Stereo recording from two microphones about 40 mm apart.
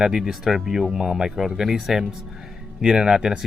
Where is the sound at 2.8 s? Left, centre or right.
Centre.